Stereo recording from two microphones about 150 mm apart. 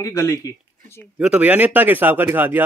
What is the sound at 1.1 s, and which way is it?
A man's voice, 10° right (ahead or behind).